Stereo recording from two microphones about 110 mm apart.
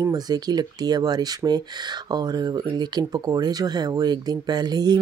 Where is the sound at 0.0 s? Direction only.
35° right (ahead or behind).